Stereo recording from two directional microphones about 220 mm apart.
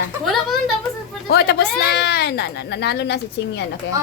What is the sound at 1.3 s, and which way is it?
Speech, 45° left (ahead or behind).